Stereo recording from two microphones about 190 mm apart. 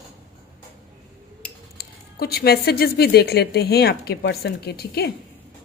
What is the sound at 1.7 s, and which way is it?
Speech, 55° left (ahead or behind).